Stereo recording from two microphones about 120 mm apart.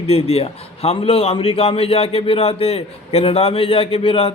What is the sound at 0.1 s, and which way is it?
A man's voice, 55° left (ahead or behind).